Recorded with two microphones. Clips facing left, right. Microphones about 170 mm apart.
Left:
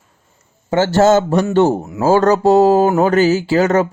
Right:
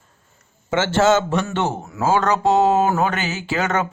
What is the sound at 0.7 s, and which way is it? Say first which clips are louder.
Speech: left 5 dB; 40° left (ahead or behind).